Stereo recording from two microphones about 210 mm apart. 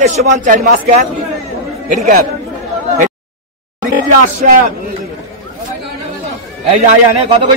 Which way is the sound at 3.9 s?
40° right (ahead or behind).